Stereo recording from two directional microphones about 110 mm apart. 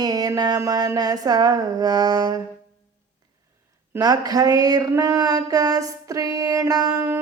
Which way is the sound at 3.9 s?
35° right (ahead or behind).